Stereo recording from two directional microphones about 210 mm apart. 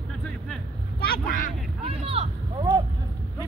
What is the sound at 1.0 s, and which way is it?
Vehicle, 45° left (ahead or behind).